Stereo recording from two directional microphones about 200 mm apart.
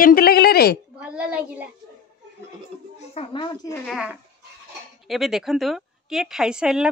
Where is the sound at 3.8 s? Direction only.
5° right (ahead or behind).